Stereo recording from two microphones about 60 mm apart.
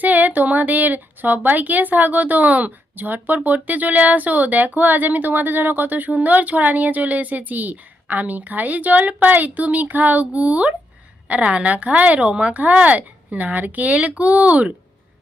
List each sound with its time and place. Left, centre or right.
0.0 s speech: right